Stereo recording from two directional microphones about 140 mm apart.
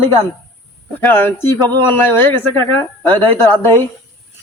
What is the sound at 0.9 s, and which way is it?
A man's voice, 15° left (ahead or behind).